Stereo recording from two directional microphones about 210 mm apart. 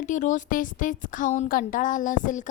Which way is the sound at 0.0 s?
35° left (ahead or behind).